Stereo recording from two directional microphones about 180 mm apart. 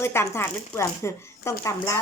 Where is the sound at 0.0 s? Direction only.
15° left (ahead or behind).